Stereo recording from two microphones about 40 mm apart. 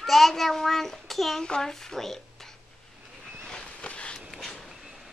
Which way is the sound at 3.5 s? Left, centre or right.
Centre.